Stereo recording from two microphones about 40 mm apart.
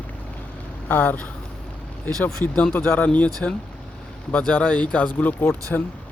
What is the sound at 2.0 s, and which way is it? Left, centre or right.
Speech, left.